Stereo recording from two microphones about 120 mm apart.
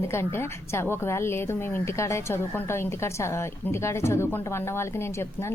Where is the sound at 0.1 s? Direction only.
20° left (ahead or behind).